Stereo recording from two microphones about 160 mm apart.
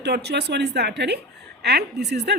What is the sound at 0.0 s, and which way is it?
A woman's voice, 90° right.